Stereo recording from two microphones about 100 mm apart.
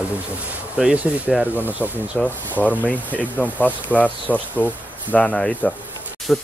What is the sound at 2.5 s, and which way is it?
Speech, 15° left (ahead or behind).